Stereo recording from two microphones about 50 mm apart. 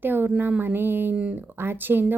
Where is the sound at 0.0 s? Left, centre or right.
Right.